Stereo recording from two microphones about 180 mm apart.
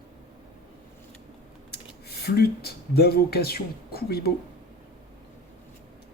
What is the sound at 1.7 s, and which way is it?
Speech, 60° left (ahead or behind).